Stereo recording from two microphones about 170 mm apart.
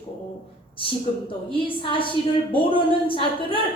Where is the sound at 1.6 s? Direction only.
30° left (ahead or behind).